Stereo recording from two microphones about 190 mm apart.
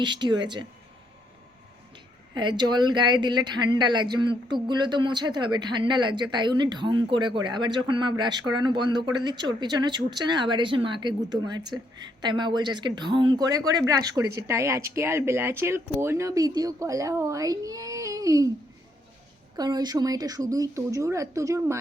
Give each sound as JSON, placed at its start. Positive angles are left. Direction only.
{"t": 0.0, "sound": "speech", "side_deg": -25}
{"t": 2.3, "sound": "speech", "side_deg": -25}
{"t": 19.5, "sound": "speech", "side_deg": -20}